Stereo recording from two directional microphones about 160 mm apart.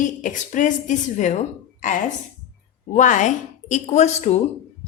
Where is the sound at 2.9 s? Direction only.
50° left (ahead or behind).